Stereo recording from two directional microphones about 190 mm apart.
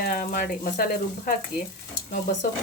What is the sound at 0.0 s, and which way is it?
Speech, 50° left (ahead or behind).